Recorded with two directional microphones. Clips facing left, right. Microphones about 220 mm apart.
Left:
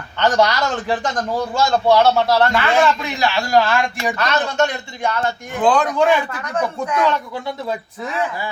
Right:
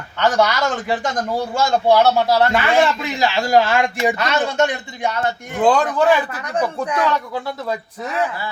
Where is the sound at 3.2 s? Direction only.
20° right (ahead or behind).